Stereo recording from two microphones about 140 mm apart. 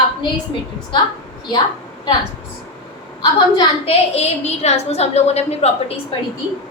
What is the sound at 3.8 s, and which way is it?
A woman's voice, 50° left (ahead or behind).